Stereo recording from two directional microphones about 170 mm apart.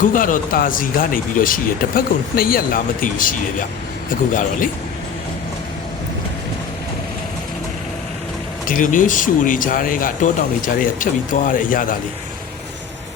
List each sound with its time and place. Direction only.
0.0 s speech: 50° left (ahead or behind)
8.6 s speech: 50° left (ahead or behind)